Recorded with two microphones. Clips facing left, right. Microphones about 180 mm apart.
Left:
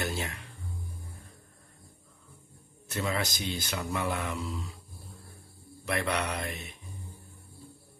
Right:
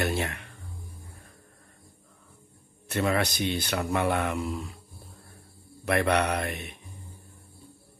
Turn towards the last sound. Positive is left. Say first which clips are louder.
# right 5 dB
turn(degrees=-60)  # may be behind; listen again after turning